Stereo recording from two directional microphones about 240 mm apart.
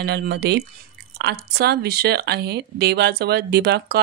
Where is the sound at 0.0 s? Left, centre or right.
Right.